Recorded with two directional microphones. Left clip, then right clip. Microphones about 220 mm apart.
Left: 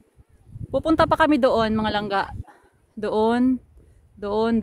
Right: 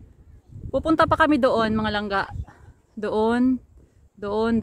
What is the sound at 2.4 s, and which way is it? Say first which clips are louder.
Dog: left 1 dB; 5° left (ahead or behind).